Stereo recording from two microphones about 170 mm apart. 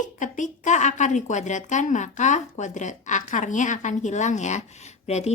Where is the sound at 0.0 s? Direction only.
45° left (ahead or behind).